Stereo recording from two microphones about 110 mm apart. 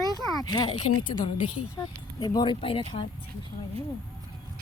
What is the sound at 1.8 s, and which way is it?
Speech, 35° left (ahead or behind).